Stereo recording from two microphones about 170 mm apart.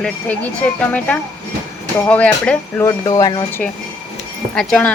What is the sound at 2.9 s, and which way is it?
Speech, 20° left (ahead or behind).